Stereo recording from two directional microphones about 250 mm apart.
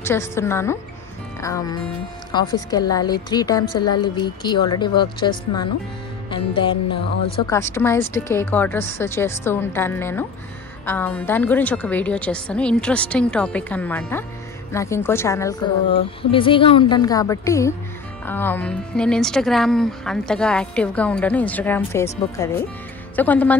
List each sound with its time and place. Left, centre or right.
0.0 s a woman's voice: centre
6.3 s music: centre
7.3 s a woman's voice: centre